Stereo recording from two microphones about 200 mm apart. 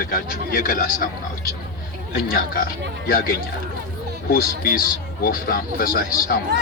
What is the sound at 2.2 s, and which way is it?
Speech, 45° left (ahead or behind).